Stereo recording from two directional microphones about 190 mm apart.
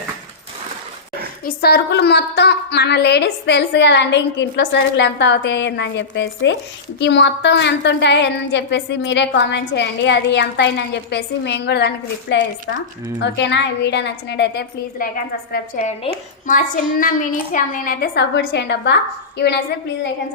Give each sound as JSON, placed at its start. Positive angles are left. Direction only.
{"t": 1.5, "sound": "a woman's voice", "side_deg": 55}